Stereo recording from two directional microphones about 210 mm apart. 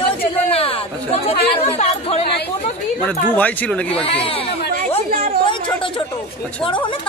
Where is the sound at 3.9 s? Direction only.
25° left (ahead or behind).